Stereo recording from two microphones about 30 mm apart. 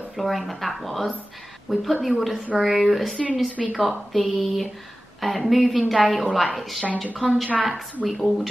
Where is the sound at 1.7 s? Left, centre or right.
Centre.